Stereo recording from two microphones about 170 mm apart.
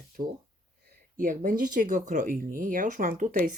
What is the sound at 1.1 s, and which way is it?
Speech, 50° right (ahead or behind).